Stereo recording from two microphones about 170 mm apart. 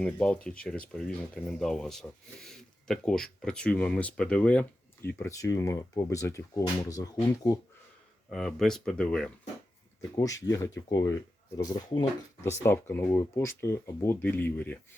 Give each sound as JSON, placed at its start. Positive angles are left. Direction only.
{"t": 0.0, "sound": "speech", "side_deg": 5}
{"t": 5.0, "sound": "speech", "side_deg": 15}
{"t": 8.3, "sound": "speech", "side_deg": 0}
{"t": 10.2, "sound": "speech", "side_deg": 20}